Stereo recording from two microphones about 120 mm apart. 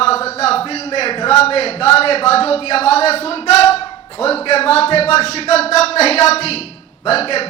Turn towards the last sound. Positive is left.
turn(degrees=55)  # may be behind; listen again after turning